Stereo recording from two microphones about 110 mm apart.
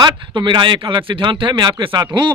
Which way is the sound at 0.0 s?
45° right (ahead or behind).